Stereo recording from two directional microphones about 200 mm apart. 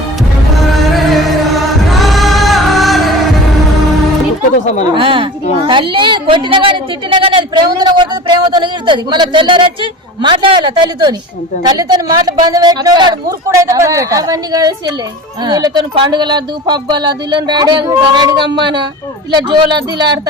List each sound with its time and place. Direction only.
0.7 s music: centre (ahead or behind)
4.9 s speech: 25° right (ahead or behind)
5.6 s a sound: 25° right (ahead or behind)
10.2 s speech: 25° right (ahead or behind)